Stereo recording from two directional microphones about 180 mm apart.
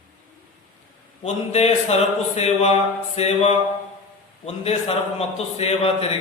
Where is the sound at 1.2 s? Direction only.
35° left (ahead or behind).